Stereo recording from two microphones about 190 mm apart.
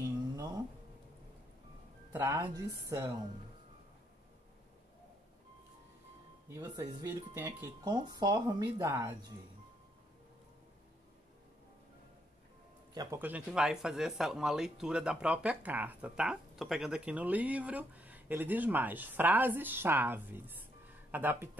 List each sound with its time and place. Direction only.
0.4 s a sound: 20° right (ahead or behind)
2.1 s speech: 15° right (ahead or behind)
6.5 s speech: 20° right (ahead or behind)
12.9 s speech: 15° right (ahead or behind)